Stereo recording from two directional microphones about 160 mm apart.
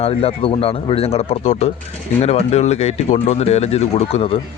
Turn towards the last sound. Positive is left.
turn(degrees=40)  # may be behind; listen again after turning